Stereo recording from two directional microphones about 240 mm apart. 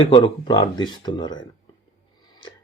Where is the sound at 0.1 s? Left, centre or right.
Centre.